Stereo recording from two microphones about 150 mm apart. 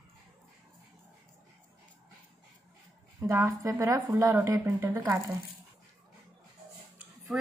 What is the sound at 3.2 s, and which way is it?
A woman's voice, 20° right (ahead or behind).